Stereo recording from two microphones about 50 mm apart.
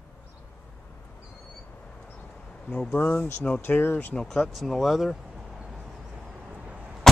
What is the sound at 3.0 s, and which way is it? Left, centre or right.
Speech, left.